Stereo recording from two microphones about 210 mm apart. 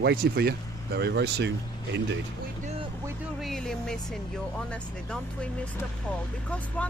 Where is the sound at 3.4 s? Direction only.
Centre (ahead or behind).